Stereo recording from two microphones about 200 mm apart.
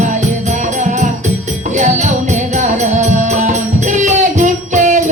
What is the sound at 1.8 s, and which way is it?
Music, 35° right (ahead or behind).